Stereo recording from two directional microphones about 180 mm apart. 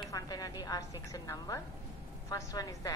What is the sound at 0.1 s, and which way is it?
A woman's voice, 20° left (ahead or behind).